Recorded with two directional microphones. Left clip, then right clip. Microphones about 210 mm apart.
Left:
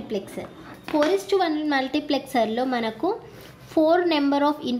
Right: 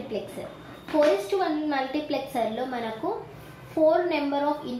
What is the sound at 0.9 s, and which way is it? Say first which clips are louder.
A woman's voice: left 1 dB; 50° left (ahead or behind).